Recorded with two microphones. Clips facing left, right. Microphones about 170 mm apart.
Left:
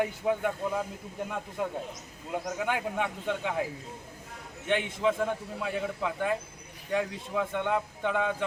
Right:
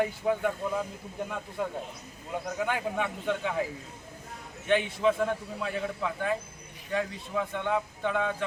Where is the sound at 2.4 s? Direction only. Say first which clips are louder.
Right 1 dB; 10° left (ahead or behind).